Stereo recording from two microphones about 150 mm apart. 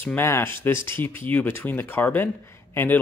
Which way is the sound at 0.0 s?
15° left (ahead or behind).